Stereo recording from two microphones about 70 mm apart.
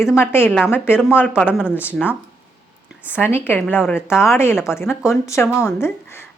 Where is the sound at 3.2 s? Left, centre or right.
Left.